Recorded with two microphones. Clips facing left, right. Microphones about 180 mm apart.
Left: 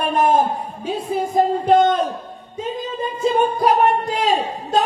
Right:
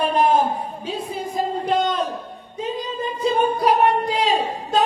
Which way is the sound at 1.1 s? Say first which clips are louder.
Left 8 dB; 50° left (ahead or behind).